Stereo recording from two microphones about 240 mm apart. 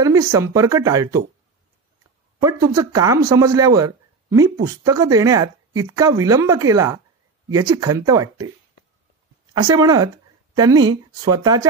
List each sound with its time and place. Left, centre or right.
0.0 s speech: centre
2.4 s speech: centre
9.5 s speech: centre